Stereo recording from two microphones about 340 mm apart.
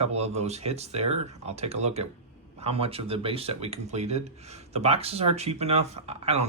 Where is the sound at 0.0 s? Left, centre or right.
Centre.